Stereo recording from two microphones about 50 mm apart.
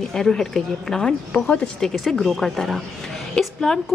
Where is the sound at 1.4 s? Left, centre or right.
Left.